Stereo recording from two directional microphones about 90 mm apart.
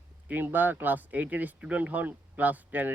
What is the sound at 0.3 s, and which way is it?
Speech, 20° right (ahead or behind).